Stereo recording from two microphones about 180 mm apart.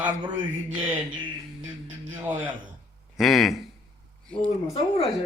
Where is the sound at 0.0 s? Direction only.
25° right (ahead or behind).